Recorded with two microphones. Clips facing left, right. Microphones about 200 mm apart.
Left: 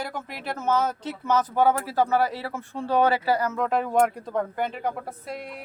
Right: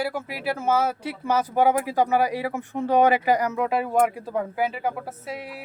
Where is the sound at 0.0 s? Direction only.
5° right (ahead or behind).